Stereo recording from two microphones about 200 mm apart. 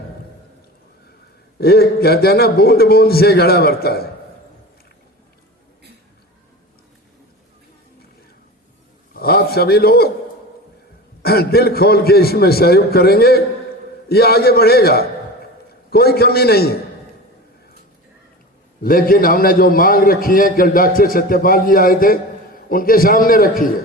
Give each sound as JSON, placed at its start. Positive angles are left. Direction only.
{"t": 1.5, "sound": "a man's voice", "side_deg": 50}
{"t": 9.1, "sound": "a man's voice", "side_deg": 50}
{"t": 11.2, "sound": "a man's voice", "side_deg": 50}
{"t": 18.8, "sound": "a man's voice", "side_deg": 45}